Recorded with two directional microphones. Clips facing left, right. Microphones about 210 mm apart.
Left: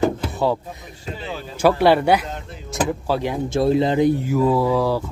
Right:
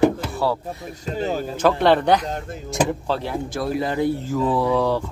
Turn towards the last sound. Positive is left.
turn(degrees=10)  # may be behind; listen again after turning